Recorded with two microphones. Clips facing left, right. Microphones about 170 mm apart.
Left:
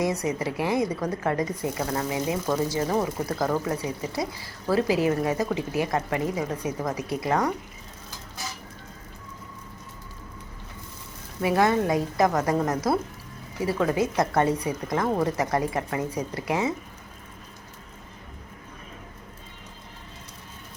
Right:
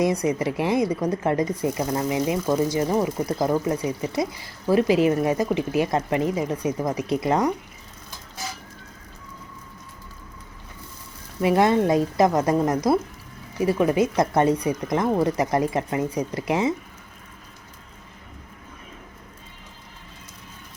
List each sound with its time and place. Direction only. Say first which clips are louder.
0.0 s speech: right 4 dB; 20° right (ahead or behind)
11.3 s speech: right 3 dB; 25° right (ahead or behind)